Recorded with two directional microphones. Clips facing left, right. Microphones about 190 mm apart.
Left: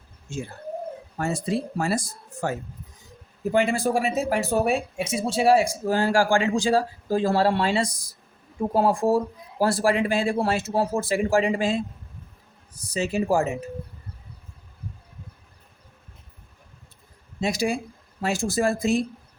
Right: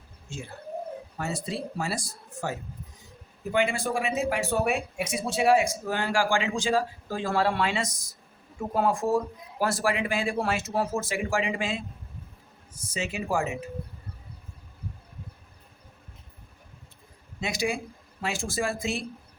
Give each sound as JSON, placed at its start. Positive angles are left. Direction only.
{"t": 1.2, "sound": "speech", "side_deg": 50}
{"t": 3.5, "sound": "speech", "side_deg": 35}
{"t": 17.4, "sound": "speech", "side_deg": 35}